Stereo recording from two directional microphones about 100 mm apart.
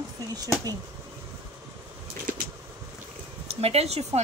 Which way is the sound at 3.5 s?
90° right.